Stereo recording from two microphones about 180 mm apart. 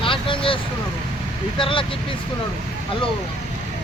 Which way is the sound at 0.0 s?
30° left (ahead or behind).